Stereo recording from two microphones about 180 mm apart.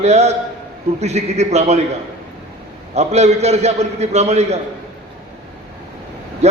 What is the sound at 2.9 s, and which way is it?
A man's voice, 35° right (ahead or behind).